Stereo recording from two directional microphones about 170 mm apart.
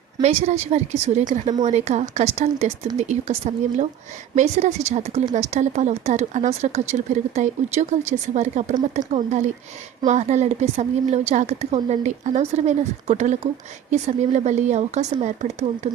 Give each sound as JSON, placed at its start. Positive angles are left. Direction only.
{"t": 0.2, "sound": "speech", "side_deg": -40}